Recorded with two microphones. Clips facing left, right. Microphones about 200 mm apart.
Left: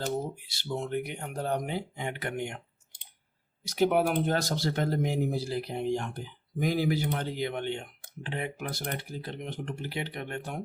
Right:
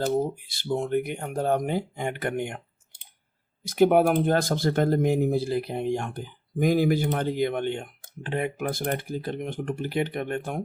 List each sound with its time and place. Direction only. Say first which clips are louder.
0.0 s speech: right 7 dB; 50° right (ahead or behind)
3.7 s speech: right 6 dB; 50° right (ahead or behind)